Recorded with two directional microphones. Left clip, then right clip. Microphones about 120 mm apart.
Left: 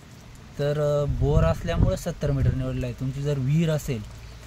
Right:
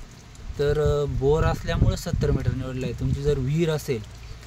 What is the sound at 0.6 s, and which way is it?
Speech, 20° right (ahead or behind).